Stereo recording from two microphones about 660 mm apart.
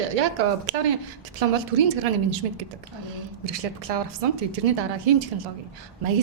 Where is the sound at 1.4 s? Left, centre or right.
Right.